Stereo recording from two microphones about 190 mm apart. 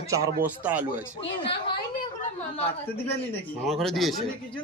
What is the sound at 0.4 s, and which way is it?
Speech, 10° right (ahead or behind).